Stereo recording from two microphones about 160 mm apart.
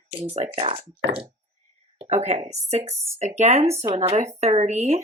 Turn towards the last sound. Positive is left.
turn(degrees=-45)  # may be behind; listen again after turning